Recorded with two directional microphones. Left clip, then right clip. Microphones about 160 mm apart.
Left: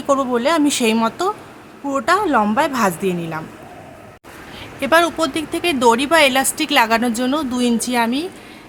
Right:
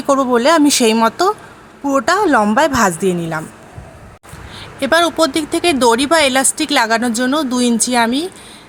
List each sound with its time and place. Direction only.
0.0 s speech: 30° right (ahead or behind)
4.8 s speech: 25° right (ahead or behind)